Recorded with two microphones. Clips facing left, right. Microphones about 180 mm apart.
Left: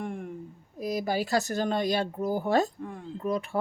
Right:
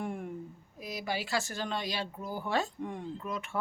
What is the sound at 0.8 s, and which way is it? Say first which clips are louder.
Speech: left 8 dB; 40° left (ahead or behind).